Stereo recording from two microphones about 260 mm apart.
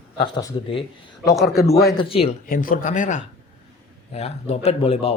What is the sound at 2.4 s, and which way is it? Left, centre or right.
Speech, left.